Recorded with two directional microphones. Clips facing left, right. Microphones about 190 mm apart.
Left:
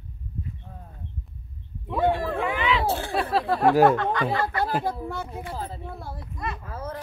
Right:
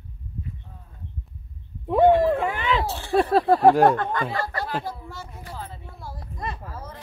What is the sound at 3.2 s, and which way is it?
Speech, 45° right (ahead or behind).